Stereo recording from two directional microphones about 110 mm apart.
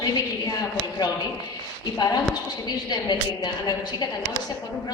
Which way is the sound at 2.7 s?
40° left (ahead or behind).